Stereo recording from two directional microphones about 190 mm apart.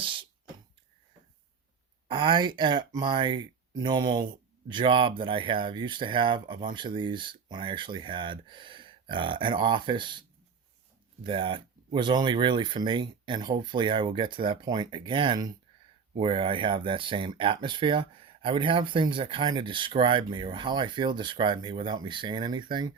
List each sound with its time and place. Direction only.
0.0 s beatboxing: 25° right (ahead or behind)
2.0 s speech: 25° right (ahead or behind)